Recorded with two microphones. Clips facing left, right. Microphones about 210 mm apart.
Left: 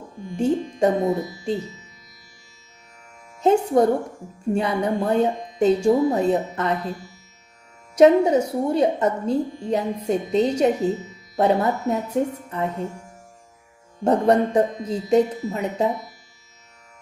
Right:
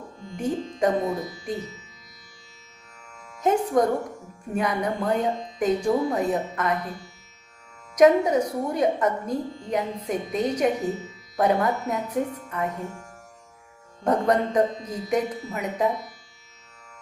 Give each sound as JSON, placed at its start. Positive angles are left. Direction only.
{"t": 0.3, "sound": "speech", "side_deg": 25}
{"t": 3.4, "sound": "speech", "side_deg": 30}
{"t": 7.9, "sound": "speech", "side_deg": 30}